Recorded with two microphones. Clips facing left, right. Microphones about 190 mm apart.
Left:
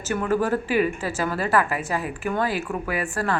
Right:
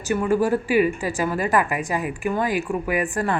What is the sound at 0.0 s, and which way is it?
A woman's voice, 10° right (ahead or behind).